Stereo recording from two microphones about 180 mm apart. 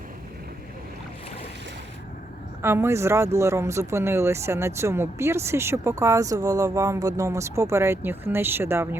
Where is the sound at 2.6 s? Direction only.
15° right (ahead or behind).